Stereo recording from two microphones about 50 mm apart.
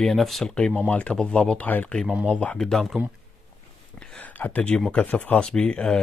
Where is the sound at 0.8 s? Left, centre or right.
Left.